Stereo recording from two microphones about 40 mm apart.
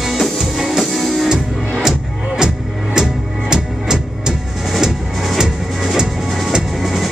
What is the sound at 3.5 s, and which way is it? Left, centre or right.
Music, centre.